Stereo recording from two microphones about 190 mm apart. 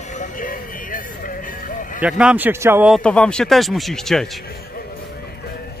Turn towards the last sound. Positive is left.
turn(degrees=0)  # may be behind; listen again after turning